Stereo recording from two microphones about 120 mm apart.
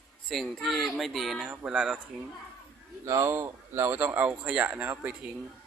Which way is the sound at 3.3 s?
20° right (ahead or behind).